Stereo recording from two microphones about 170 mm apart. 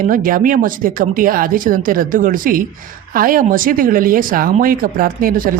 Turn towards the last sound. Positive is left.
turn(degrees=-55)  # may be behind; listen again after turning